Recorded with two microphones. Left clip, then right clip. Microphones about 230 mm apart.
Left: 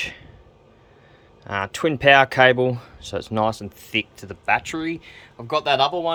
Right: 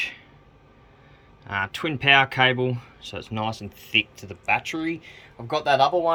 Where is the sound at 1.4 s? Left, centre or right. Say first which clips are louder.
Left 4 dB; centre.